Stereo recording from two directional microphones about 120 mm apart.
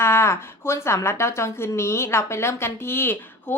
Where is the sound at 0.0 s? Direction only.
20° left (ahead or behind).